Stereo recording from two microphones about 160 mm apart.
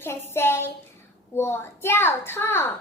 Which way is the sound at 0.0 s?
15° left (ahead or behind).